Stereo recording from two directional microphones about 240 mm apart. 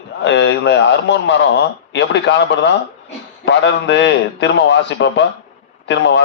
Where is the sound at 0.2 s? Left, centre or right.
Left.